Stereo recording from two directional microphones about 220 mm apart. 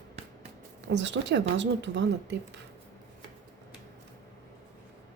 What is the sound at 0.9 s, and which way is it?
A woman's voice, 55° right (ahead or behind).